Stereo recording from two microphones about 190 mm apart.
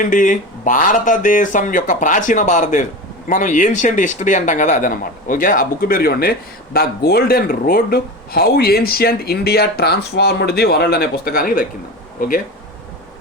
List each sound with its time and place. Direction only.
0.0 s speech: 45° left (ahead or behind)